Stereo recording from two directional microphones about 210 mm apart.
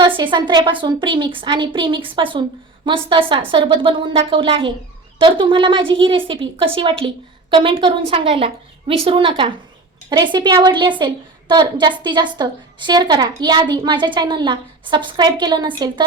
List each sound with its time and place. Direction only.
0.0 s a woman's voice: 20° right (ahead or behind)